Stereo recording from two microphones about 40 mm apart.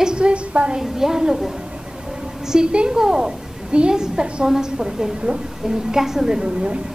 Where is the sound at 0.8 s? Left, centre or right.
Centre.